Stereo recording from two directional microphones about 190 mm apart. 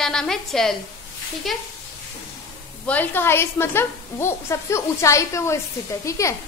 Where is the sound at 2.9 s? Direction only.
10° left (ahead or behind).